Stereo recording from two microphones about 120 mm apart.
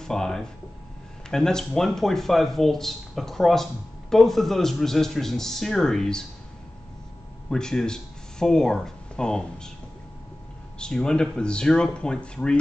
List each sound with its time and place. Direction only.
0.0 s speech: 5° left (ahead or behind)
7.4 s speech: 5° left (ahead or behind)
10.8 s speech: 5° left (ahead or behind)